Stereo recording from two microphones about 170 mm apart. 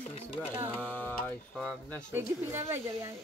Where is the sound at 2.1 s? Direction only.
15° right (ahead or behind).